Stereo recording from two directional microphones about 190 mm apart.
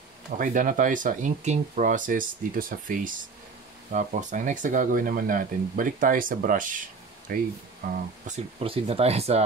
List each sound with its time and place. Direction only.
0.4 s speech: 45° right (ahead or behind)
8.3 s speech: 30° right (ahead or behind)